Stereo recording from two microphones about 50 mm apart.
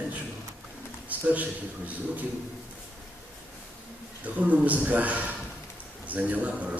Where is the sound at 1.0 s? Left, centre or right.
Right.